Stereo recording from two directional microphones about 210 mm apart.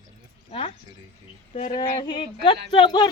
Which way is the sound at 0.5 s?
25° left (ahead or behind).